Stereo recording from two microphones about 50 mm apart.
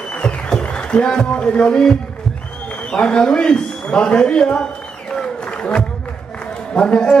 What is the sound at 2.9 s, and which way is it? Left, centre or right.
A man's voice, centre.